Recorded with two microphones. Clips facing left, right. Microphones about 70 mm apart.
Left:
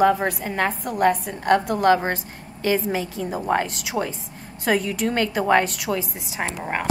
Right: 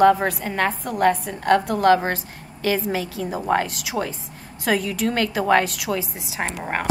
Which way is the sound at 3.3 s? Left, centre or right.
Centre.